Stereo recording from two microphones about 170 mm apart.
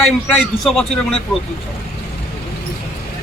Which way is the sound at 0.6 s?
Centre (ahead or behind).